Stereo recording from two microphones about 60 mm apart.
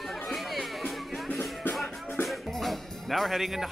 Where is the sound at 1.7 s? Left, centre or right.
Left.